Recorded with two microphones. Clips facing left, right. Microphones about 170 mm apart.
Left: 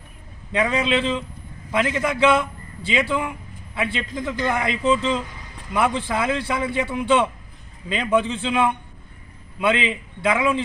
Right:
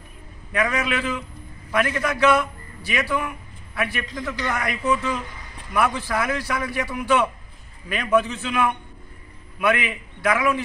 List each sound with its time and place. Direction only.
0.5 s a man's voice: 25° left (ahead or behind)